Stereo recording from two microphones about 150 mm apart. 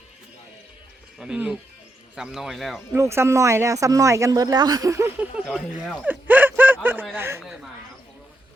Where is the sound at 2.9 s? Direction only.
20° right (ahead or behind).